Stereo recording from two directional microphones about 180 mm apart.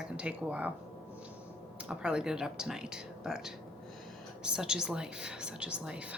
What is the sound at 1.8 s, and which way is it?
A woman's voice, 5° right (ahead or behind).